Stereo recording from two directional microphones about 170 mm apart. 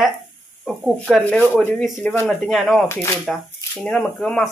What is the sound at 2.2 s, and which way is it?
Speech, centre (ahead or behind).